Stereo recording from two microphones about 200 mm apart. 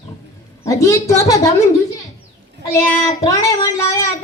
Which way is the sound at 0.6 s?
15° left (ahead or behind).